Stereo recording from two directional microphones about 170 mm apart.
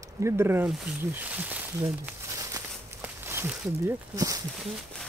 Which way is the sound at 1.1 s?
10° right (ahead or behind).